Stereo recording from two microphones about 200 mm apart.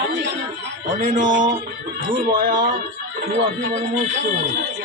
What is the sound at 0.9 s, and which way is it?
Speech, 40° right (ahead or behind).